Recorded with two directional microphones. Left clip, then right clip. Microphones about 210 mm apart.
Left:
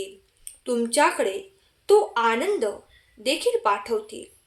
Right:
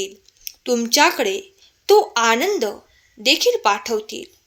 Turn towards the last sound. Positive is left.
turn(degrees=-40)  # may be behind; listen again after turning